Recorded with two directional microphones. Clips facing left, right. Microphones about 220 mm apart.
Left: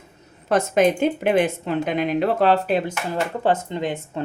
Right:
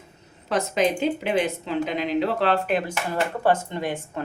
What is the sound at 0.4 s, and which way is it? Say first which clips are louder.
A woman's voice: left 5 dB; 50° left (ahead or behind).